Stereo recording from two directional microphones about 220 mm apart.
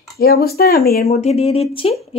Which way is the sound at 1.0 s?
30° left (ahead or behind).